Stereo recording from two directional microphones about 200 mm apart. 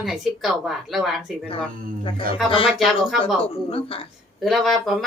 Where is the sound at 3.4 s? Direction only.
30° left (ahead or behind).